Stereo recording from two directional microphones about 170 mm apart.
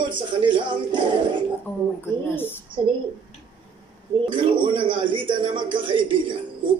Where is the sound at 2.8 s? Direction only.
30° right (ahead or behind).